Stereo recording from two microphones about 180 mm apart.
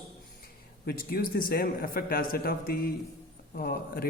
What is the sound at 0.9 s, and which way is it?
A man's voice, 50° left (ahead or behind).